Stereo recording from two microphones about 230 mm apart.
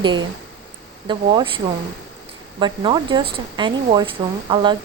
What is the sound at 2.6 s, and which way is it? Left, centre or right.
Speech, centre.